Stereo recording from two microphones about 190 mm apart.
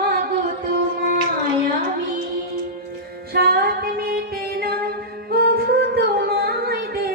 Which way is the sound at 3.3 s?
55° right (ahead or behind).